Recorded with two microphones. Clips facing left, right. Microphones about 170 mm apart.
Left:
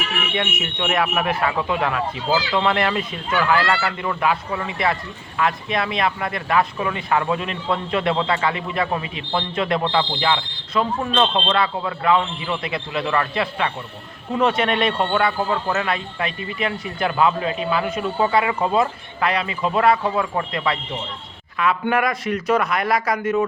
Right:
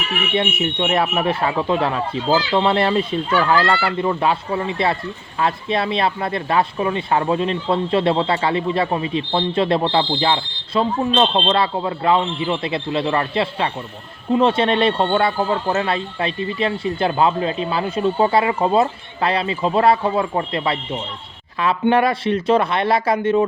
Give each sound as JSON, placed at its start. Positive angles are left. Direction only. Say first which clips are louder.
{"t": 0.3, "sound": "speech", "louder": "right 7 dB", "side_deg": -30}